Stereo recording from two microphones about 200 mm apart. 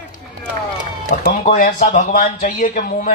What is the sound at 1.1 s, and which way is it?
A man's voice, 45° left (ahead or behind).